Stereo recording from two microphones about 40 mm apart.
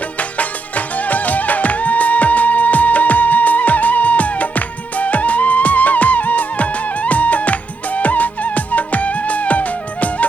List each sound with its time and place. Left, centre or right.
0.2 s music: left